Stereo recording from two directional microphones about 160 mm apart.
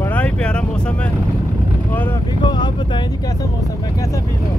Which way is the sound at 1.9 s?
15° left (ahead or behind).